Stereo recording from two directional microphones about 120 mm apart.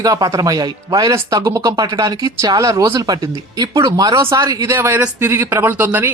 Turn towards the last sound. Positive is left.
turn(degrees=-15)  # may be behind; listen again after turning